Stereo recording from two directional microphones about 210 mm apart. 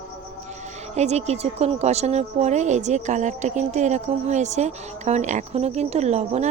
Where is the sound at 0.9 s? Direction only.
30° right (ahead or behind).